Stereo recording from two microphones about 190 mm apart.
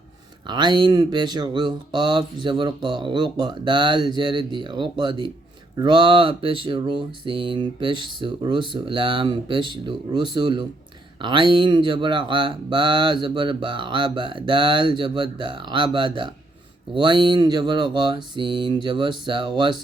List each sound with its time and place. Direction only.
0.4 s speech: 25° right (ahead or behind)